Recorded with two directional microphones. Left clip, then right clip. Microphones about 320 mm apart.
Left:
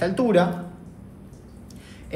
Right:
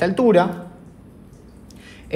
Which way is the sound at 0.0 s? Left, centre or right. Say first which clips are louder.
Right 4 dB; right.